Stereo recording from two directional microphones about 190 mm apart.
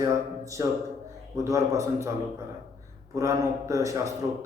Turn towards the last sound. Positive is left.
turn(degrees=-15)  # may be behind; listen again after turning